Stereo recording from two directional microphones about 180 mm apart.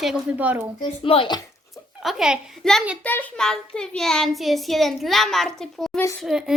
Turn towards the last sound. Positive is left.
turn(degrees=0)  # may be behind; listen again after turning